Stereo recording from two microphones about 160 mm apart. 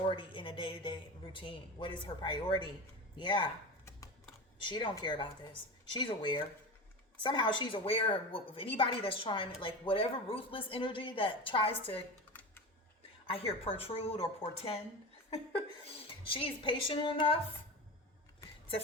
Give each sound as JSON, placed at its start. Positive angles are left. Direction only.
{"t": 0.1, "sound": "a man's voice", "side_deg": 30}
{"t": 4.6, "sound": "a woman's voice", "side_deg": 30}
{"t": 12.3, "sound": "typing", "side_deg": 10}
{"t": 13.2, "sound": "a man's voice", "side_deg": 35}
{"t": 18.4, "sound": "a sound", "side_deg": 20}